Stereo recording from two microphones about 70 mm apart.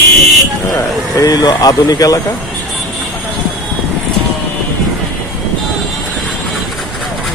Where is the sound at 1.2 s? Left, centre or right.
Left.